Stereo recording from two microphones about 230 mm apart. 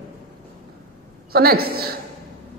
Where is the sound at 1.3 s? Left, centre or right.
Right.